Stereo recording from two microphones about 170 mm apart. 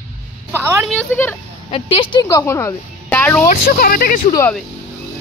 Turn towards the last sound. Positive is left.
turn(degrees=55)  # may be behind; listen again after turning